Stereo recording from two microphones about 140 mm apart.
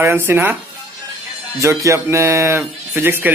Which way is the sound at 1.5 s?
20° right (ahead or behind).